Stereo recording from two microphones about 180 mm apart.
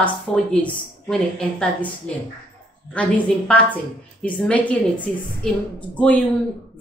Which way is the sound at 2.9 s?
5° left (ahead or behind).